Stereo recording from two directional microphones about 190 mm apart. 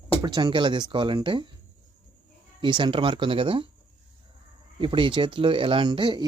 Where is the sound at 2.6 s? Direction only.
25° right (ahead or behind).